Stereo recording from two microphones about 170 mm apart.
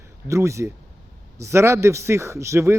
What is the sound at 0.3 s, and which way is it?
A man's voice, 15° right (ahead or behind).